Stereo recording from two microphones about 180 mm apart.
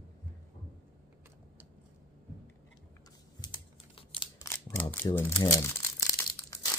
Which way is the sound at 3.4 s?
30° left (ahead or behind).